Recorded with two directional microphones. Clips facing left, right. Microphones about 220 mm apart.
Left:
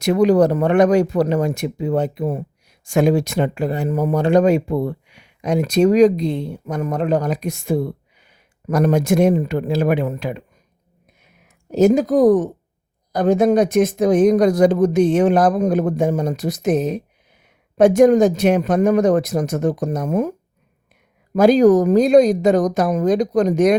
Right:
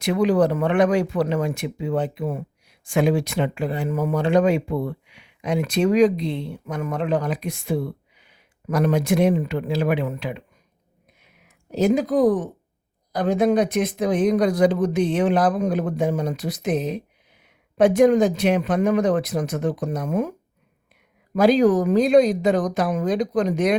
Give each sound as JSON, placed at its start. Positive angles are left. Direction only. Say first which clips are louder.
{"t": 0.0, "sound": "speech", "louder": "left 5 dB", "side_deg": 40}
{"t": 11.2, "sound": "a sound", "louder": "left 2 dB", "side_deg": 45}
{"t": 13.1, "sound": "speech", "louder": "left 4 dB", "side_deg": 45}
{"t": 21.3, "sound": "speech", "louder": "left 5 dB", "side_deg": 45}